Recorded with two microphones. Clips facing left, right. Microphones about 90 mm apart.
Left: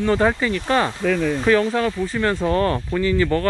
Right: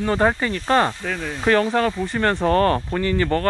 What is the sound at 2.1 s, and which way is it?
Speech, 45° right (ahead or behind).